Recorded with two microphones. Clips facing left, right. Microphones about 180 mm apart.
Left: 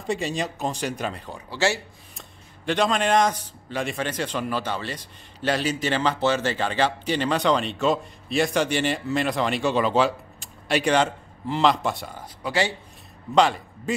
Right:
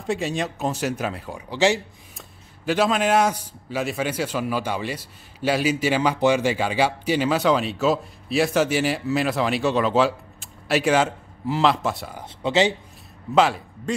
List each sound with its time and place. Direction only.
0.0 s a man's voice: centre (ahead or behind)
1.5 s speech: 15° right (ahead or behind)
2.1 s a man's voice: 5° right (ahead or behind)
12.4 s speech: 20° right (ahead or behind)
13.3 s a man's voice: 5° right (ahead or behind)